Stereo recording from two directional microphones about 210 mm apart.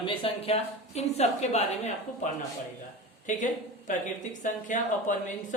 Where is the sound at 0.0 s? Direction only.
25° left (ahead or behind).